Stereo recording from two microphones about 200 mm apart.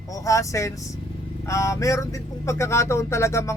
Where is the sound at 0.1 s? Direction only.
15° left (ahead or behind).